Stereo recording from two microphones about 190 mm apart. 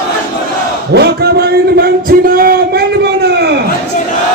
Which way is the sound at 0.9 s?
55° right (ahead or behind).